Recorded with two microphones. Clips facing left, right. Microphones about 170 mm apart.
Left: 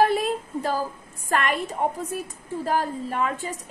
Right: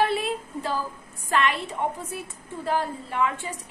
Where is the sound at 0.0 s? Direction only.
45° left (ahead or behind).